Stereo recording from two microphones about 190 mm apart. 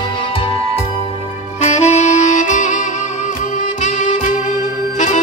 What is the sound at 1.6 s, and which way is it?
Saxophone, 35° left (ahead or behind).